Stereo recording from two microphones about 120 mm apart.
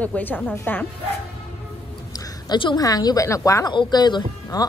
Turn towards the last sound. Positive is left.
turn(degrees=35)  # may be behind; listen again after turning